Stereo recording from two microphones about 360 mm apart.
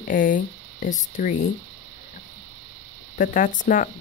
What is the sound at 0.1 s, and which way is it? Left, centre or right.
Speech, left.